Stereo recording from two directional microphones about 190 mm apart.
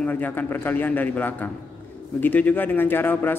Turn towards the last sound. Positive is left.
turn(degrees=10)  # may be behind; listen again after turning